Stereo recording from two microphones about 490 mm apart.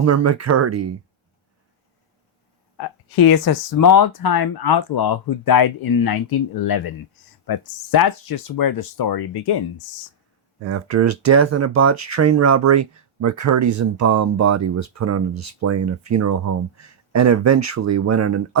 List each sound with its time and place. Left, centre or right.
0.0 s speech: right
2.7 s speech: left
10.6 s speech: right